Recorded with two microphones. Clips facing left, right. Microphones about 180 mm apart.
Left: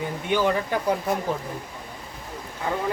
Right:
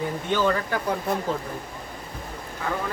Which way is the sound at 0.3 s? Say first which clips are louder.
Left 1 dB; 15° left (ahead or behind).